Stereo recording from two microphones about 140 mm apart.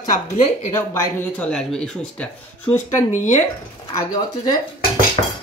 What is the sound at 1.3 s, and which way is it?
Speech, 5° left (ahead or behind).